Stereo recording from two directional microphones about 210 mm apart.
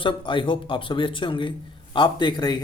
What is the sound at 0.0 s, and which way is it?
Speech, 25° left (ahead or behind).